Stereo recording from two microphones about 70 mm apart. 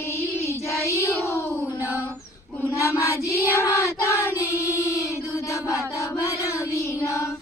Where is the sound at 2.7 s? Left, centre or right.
Left.